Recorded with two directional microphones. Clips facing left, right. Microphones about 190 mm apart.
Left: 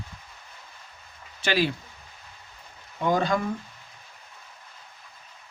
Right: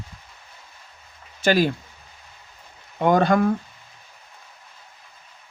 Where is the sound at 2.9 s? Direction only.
60° right (ahead or behind).